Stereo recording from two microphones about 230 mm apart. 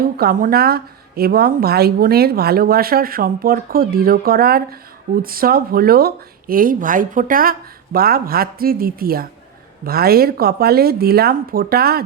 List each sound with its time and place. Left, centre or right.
0.0 s speech: right